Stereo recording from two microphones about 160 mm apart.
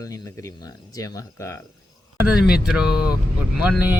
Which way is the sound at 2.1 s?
5° right (ahead or behind).